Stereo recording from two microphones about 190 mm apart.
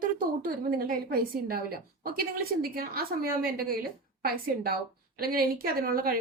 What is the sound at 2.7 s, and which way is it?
Speech, 50° right (ahead or behind).